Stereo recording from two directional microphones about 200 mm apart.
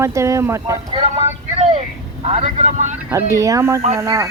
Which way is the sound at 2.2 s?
30° right (ahead or behind).